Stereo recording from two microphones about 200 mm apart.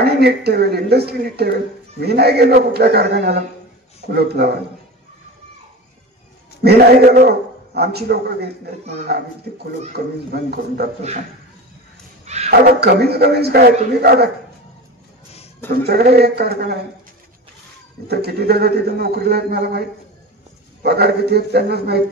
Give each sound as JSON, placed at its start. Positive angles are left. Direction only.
{"t": 0.0, "sound": "speech", "side_deg": -55}
{"t": 6.6, "sound": "speech", "side_deg": -50}
{"t": 10.3, "sound": "speech", "side_deg": -55}
{"t": 12.3, "sound": "speech", "side_deg": -35}
{"t": 12.9, "sound": "speech", "side_deg": -55}
{"t": 15.7, "sound": "speech", "side_deg": -50}
{"t": 18.0, "sound": "speech", "side_deg": -55}